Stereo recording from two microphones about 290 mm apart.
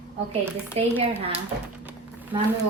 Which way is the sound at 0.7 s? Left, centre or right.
Right.